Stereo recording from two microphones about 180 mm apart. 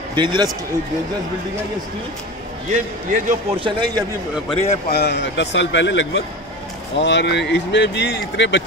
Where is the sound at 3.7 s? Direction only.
25° right (ahead or behind).